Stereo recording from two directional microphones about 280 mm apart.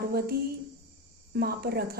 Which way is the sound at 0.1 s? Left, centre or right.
Right.